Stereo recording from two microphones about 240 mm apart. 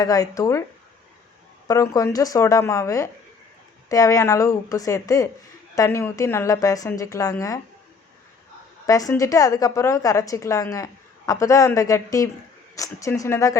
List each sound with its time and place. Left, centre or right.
0.0 s a woman's voice: centre
1.6 s a woman's voice: centre
8.9 s a woman's voice: centre